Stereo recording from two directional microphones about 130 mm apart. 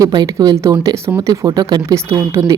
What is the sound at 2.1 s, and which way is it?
Speech, 20° right (ahead or behind).